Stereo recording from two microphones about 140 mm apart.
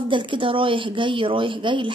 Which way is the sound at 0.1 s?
35° right (ahead or behind).